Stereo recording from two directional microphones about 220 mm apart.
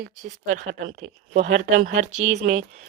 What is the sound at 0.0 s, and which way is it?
Speech, 35° right (ahead or behind).